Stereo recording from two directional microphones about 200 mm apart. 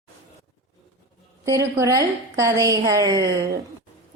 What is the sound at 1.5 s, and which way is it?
A woman's voice, 15° right (ahead or behind).